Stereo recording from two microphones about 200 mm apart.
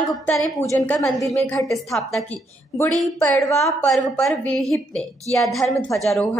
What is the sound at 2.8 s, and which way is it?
Speech, 15° left (ahead or behind).